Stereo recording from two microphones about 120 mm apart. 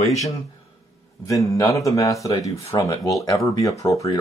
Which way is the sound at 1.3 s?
25° left (ahead or behind).